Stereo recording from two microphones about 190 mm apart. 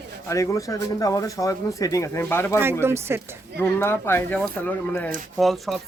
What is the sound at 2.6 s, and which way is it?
Speech, 10° right (ahead or behind).